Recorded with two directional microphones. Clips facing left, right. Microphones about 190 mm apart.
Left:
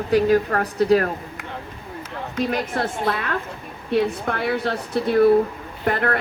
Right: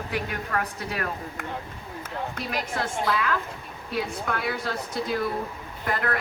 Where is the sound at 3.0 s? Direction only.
55° left (ahead or behind).